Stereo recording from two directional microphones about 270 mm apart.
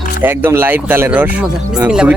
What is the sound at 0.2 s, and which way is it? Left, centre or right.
Speech, centre.